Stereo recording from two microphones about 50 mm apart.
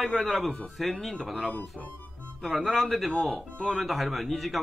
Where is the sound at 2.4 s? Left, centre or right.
Centre.